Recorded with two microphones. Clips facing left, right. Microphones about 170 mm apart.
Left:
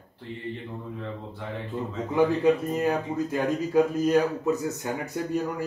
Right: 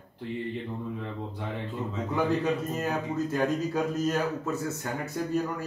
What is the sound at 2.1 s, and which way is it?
A man's voice, 15° left (ahead or behind).